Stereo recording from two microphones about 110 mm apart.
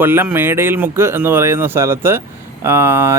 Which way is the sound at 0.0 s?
20° right (ahead or behind).